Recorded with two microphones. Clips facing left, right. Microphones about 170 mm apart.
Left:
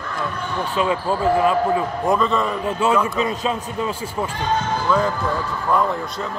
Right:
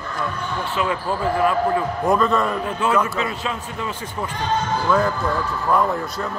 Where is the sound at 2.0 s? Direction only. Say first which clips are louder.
Right 2 dB; centre (ahead or behind).